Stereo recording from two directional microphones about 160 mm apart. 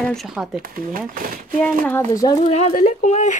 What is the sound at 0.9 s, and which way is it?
Speech, 60° right (ahead or behind).